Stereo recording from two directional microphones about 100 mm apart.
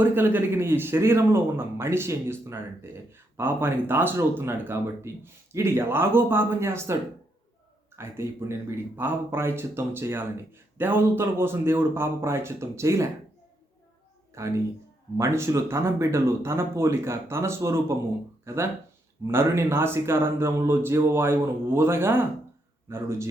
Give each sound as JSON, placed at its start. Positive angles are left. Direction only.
{"t": 0.0, "sound": "speech", "side_deg": -20}
{"t": 7.9, "sound": "speech", "side_deg": -25}
{"t": 14.3, "sound": "speech", "side_deg": -30}